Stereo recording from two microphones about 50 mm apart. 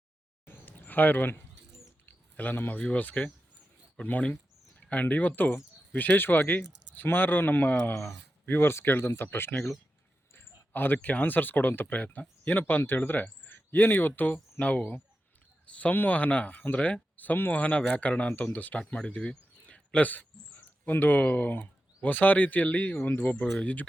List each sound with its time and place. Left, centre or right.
0.4 s a sound: left
2.3 s speech: left
8.4 s speech: left
13.5 s a sound: left
14.6 s speech: left
17.6 s speech: left
20.0 s speech: left
23.3 s speech: centre
23.6 s speech: left